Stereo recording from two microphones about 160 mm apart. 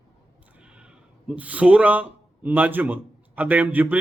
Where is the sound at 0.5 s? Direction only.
5° right (ahead or behind).